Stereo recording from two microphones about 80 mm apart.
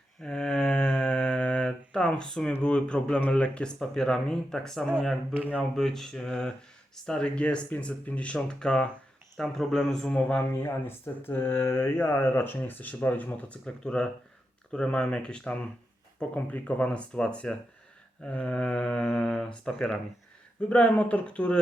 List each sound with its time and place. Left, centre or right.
0.2 s mantra: centre
4.9 s speech: centre
10.8 s speech: left